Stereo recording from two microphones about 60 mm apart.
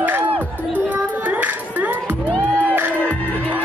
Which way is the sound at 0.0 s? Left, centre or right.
Right.